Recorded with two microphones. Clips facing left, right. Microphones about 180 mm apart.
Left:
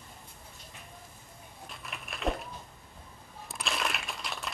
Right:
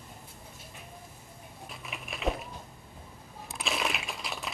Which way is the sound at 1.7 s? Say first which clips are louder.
Right 2 dB; centre (ahead or behind).